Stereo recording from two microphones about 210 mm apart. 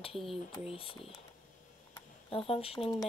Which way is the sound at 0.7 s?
25° left (ahead or behind).